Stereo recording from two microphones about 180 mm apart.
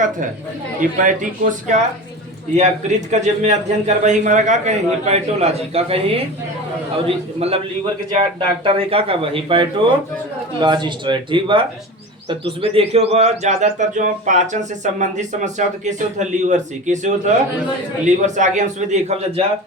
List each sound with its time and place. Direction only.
0.8 s speech: 45° right (ahead or behind)
7.3 s speech: 35° right (ahead or behind)
18.3 s speech: 40° right (ahead or behind)